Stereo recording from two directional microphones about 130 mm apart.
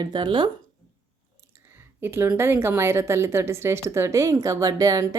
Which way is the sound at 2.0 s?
15° right (ahead or behind).